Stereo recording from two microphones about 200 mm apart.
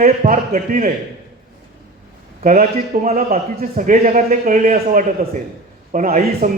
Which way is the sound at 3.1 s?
45° right (ahead or behind).